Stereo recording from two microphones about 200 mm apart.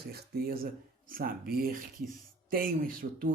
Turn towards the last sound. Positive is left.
turn(degrees=-45)  # may be behind; listen again after turning